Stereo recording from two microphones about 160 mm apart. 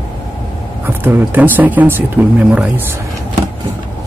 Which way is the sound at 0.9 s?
15° right (ahead or behind).